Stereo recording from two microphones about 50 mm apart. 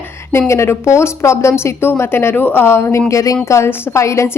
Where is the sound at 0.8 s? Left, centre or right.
Left.